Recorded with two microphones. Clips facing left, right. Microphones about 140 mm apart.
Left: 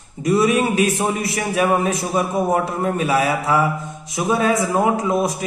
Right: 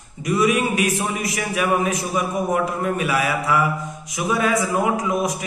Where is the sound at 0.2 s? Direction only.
30° left (ahead or behind).